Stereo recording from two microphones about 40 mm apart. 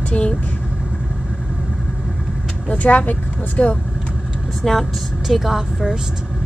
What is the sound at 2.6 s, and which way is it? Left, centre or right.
Speech, left.